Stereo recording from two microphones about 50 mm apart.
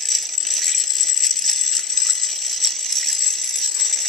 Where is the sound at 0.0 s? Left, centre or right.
Centre.